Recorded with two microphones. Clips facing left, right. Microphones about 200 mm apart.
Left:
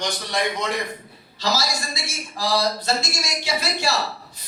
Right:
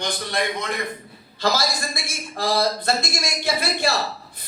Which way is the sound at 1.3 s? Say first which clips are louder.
Right 2 dB; 55° right (ahead or behind).